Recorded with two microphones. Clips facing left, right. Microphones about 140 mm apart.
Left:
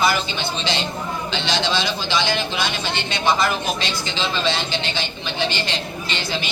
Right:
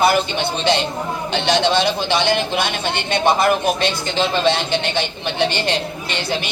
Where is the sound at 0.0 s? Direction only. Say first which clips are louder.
Right 5 dB; 60° right (ahead or behind).